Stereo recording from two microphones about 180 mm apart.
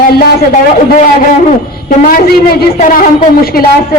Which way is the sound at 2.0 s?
50° left (ahead or behind).